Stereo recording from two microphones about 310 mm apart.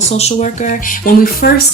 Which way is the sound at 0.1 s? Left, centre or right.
Centre.